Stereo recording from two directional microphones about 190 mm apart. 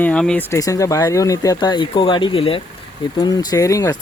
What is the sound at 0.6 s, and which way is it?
Speech, 15° left (ahead or behind).